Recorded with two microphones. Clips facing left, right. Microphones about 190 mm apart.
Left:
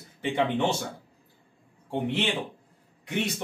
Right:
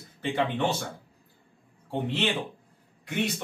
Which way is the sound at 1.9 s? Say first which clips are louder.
Left 1 dB; 10° left (ahead or behind).